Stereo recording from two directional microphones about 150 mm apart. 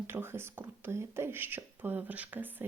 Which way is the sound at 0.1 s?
15° right (ahead or behind).